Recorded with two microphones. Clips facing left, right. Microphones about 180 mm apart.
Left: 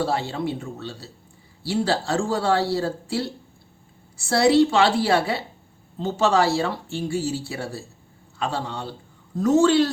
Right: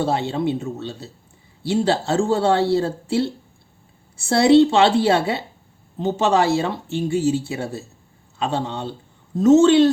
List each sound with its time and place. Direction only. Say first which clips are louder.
0.0 s speech: right 4 dB; 20° right (ahead or behind)